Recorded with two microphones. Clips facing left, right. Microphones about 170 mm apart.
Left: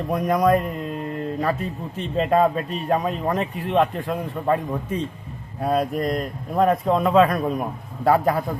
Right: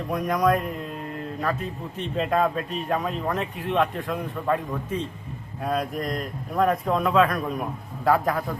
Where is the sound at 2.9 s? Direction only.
35° left (ahead or behind).